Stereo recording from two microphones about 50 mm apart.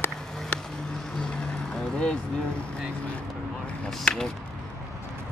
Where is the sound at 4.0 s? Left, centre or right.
Centre.